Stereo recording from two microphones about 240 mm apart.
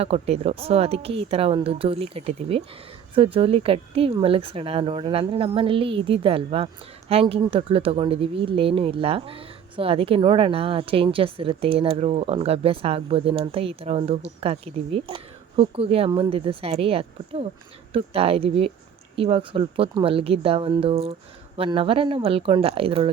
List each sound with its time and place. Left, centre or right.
0.0 s speech: right